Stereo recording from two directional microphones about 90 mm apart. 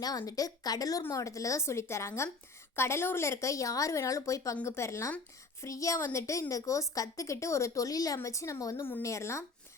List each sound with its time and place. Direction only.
0.0 s a woman's voice: 45° left (ahead or behind)